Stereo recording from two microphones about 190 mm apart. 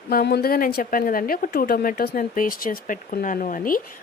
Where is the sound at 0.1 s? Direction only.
55° left (ahead or behind).